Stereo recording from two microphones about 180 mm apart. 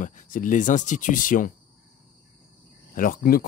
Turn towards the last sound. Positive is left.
turn(degrees=55)  # may be behind; listen again after turning